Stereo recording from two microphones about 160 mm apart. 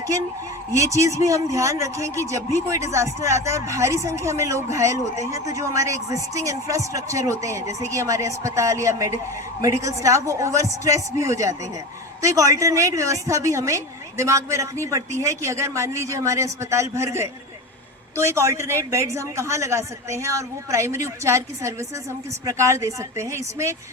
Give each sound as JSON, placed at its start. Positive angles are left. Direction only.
{"t": 0.8, "sound": "speech", "side_deg": -20}